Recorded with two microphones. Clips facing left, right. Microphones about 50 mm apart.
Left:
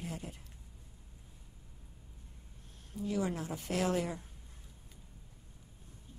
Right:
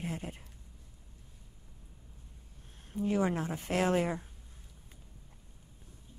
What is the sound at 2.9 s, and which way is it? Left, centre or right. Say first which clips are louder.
A woman's voice: right 5 dB; right.